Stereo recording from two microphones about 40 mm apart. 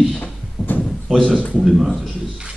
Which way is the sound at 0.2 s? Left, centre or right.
Left.